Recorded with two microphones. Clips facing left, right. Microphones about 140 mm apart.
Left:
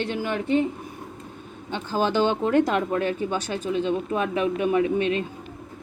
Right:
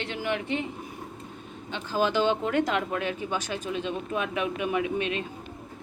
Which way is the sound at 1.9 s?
35° left (ahead or behind).